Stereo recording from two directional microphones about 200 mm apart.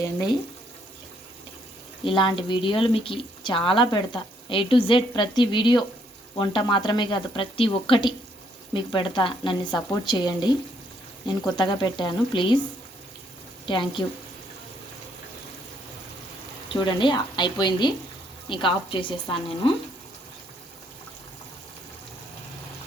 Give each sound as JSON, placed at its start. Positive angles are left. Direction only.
{"t": 2.0, "sound": "speech", "side_deg": 25}
{"t": 13.7, "sound": "speech", "side_deg": 25}
{"t": 16.6, "sound": "speech", "side_deg": 25}